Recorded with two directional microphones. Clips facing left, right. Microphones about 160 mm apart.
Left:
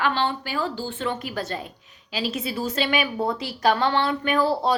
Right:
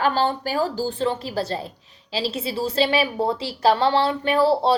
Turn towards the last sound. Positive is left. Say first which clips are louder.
# right 3 dB
turn(degrees=-30)  # may be behind; listen again after turning